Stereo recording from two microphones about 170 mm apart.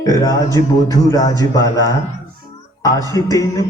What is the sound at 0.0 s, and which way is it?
Speech, 20° left (ahead or behind).